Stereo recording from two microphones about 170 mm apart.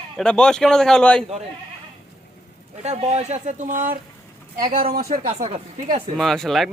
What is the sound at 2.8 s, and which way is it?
Speech, 40° right (ahead or behind).